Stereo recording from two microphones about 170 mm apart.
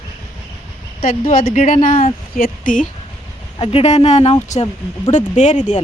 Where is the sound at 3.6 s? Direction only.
35° left (ahead or behind).